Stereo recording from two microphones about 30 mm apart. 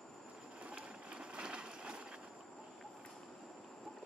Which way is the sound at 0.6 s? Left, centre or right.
Right.